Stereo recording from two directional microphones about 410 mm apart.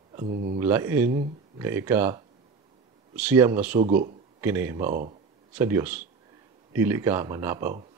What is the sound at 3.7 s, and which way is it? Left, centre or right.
Speech, centre.